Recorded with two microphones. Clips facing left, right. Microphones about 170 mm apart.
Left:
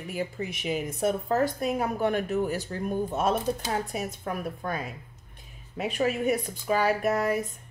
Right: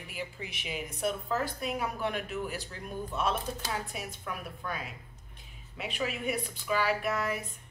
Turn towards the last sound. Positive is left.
turn(degrees=45)  # may be behind; listen again after turning